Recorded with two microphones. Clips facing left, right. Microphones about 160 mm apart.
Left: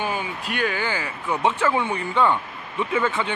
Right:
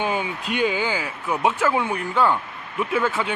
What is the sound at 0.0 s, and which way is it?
Speech, 20° right (ahead or behind).